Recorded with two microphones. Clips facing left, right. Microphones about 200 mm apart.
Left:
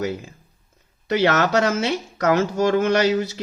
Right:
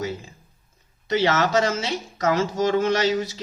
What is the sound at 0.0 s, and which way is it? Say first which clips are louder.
Speech: left 3 dB; 65° left (ahead or behind).